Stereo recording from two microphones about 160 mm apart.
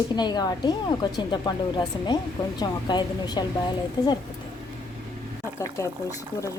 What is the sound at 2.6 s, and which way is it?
Speech, 25° left (ahead or behind).